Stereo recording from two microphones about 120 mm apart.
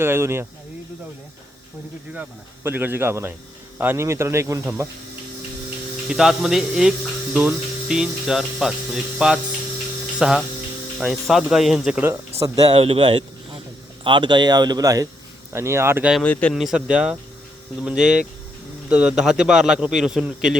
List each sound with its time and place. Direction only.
0.0 s speech: 20° right (ahead or behind)
2.6 s speech: 15° right (ahead or behind)
6.1 s speech: 5° right (ahead or behind)
12.4 s speech: 30° right (ahead or behind)
12.7 s speech: 50° right (ahead or behind); by 16.0 s 20° right (ahead or behind)
16.2 s a man's voice: 10° left (ahead or behind)
16.6 s speech: 5° right (ahead or behind)